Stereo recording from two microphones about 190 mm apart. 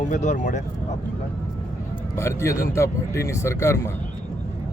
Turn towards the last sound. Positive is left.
turn(degrees=15)  # may be behind; listen again after turning